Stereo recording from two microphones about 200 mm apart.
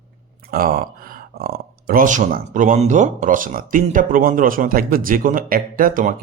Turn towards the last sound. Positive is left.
turn(degrees=-45)  # may be behind; listen again after turning